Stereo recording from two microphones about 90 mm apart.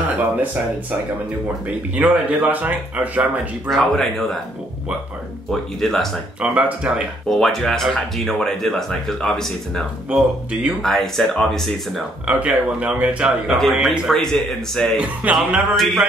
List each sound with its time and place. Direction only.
0.0 s speech: 20° right (ahead or behind)
1.7 s speech: 15° right (ahead or behind)
3.6 s speech: 5° left (ahead or behind)
5.5 s speech: centre (ahead or behind)
6.4 s speech: 15° right (ahead or behind)
7.2 s speech: 5° left (ahead or behind)
10.0 s speech: 15° right (ahead or behind)
10.8 s speech: 5° left (ahead or behind)
12.3 s speech: 10° right (ahead or behind)
13.6 s speech: centre (ahead or behind)
15.2 s speech: 15° right (ahead or behind)
15.7 s speech: 5° left (ahead or behind)